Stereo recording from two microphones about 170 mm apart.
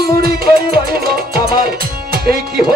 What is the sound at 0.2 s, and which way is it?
Music, 60° right (ahead or behind).